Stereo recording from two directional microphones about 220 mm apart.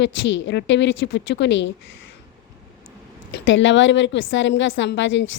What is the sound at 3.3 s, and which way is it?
Speech, 60° left (ahead or behind).